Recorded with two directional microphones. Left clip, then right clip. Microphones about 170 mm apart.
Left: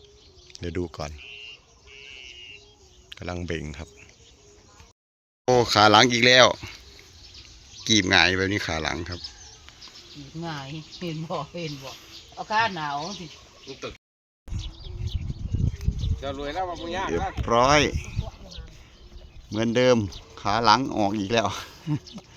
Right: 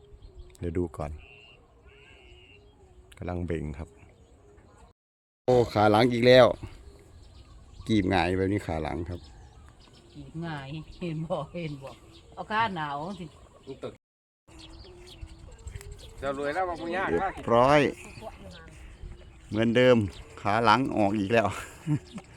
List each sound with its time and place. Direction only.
0.6 s speech: 10° right (ahead or behind)
3.1 s speech: 5° right (ahead or behind)
5.5 s speech: 5° right (ahead or behind)
8.1 s speech: 15° right (ahead or behind)
11.3 s speech: 60° left (ahead or behind)
14.5 s bird: 5° right (ahead or behind)
16.2 s speech: 65° left (ahead or behind)
17.3 s speech: 5° right (ahead or behind)